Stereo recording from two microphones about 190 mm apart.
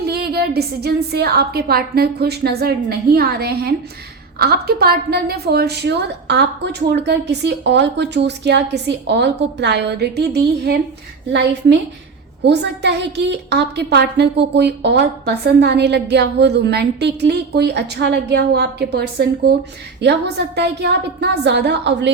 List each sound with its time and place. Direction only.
0.0 s a woman's voice: 55° right (ahead or behind)